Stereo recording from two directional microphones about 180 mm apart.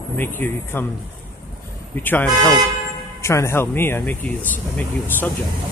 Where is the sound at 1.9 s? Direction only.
10° left (ahead or behind).